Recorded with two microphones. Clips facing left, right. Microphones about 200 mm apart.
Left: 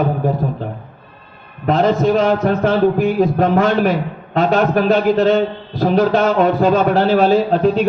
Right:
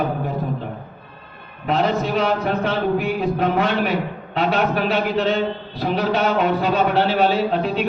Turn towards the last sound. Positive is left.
turn(degrees=40)  # may be behind; listen again after turning